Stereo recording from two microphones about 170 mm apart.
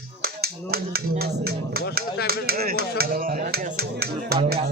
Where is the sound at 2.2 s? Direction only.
65° right (ahead or behind).